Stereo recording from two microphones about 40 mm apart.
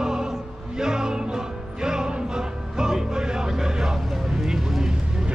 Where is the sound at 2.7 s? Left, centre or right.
Centre.